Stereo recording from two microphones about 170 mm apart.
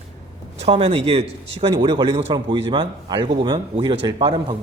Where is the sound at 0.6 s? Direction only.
35° right (ahead or behind).